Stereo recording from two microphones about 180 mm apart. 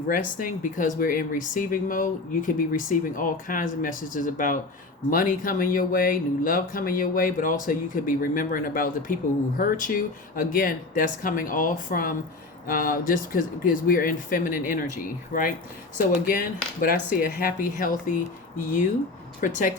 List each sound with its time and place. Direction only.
0.1 s speech: 50° left (ahead or behind)
19.4 s speech: 45° left (ahead or behind)